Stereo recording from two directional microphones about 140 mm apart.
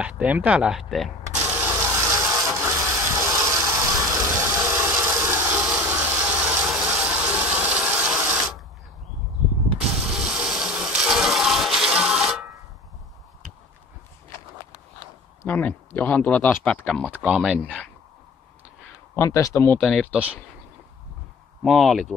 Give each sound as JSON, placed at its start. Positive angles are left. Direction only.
{"t": 0.0, "sound": "speech", "side_deg": -10}
{"t": 1.3, "sound": "rub", "side_deg": -15}
{"t": 2.0, "sound": "wood", "side_deg": -25}
{"t": 2.5, "sound": "a sound", "side_deg": -20}
{"t": 5.3, "sound": "a sound", "side_deg": -15}
{"t": 5.8, "sound": "ratchet", "side_deg": -15}
{"t": 9.8, "sound": "toilet flush", "side_deg": -5}
{"t": 15.4, "sound": "speech", "side_deg": 10}
{"t": 16.8, "sound": "speech", "side_deg": 0}
{"t": 19.1, "sound": "speech", "side_deg": 20}
{"t": 19.8, "sound": "speech", "side_deg": -5}
{"t": 21.6, "sound": "speech", "side_deg": 0}